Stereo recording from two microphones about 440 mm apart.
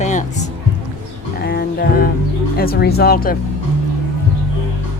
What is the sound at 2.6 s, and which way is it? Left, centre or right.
Speech, left.